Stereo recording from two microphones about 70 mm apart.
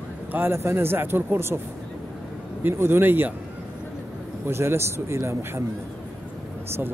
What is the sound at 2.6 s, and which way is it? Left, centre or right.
Speech, right.